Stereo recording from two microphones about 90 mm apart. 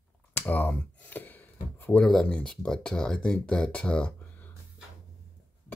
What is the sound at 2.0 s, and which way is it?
Speech, 10° left (ahead or behind).